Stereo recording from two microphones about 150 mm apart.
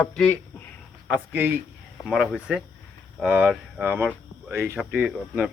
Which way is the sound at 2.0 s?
Centre (ahead or behind).